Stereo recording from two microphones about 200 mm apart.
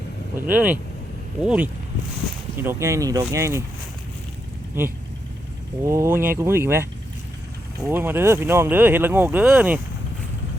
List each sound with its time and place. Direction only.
0.3 s speech: 10° right (ahead or behind)
5.8 s speech: 15° right (ahead or behind)
7.9 s speech: 10° right (ahead or behind)